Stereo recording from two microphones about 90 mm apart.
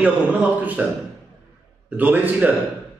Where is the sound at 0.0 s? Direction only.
15° right (ahead or behind).